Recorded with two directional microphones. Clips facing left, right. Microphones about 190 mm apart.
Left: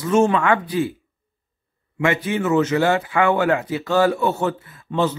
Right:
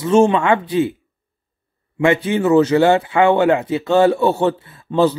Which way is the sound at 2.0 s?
30° right (ahead or behind).